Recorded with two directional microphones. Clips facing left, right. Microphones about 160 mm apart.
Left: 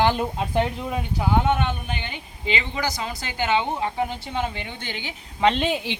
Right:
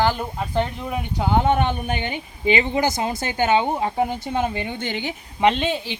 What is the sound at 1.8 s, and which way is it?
Speech, 50° right (ahead or behind).